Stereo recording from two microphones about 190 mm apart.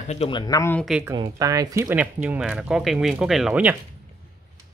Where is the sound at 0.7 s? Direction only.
Centre (ahead or behind).